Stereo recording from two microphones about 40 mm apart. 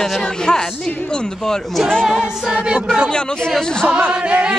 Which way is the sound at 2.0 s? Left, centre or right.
Centre.